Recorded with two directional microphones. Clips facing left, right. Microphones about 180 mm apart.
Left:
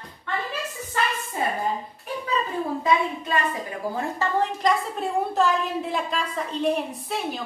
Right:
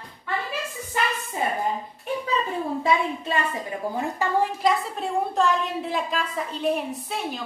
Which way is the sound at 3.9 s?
15° right (ahead or behind).